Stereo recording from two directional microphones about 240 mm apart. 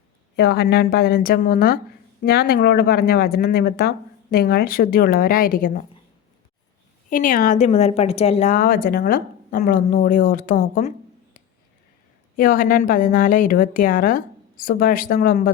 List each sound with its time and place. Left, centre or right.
0.3 s a woman's voice: left
7.1 s a woman's voice: left
12.4 s a woman's voice: left